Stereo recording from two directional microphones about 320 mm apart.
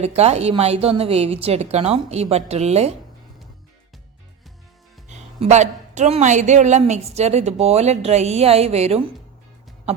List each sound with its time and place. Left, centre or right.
0.0 s a woman's voice: centre
5.0 s a woman's voice: right